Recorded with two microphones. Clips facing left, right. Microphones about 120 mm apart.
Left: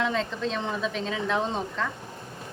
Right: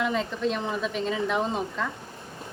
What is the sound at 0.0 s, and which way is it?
A woman's voice, 5° right (ahead or behind).